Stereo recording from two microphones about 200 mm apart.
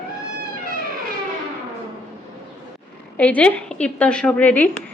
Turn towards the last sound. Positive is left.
turn(degrees=5)  # may be behind; listen again after turning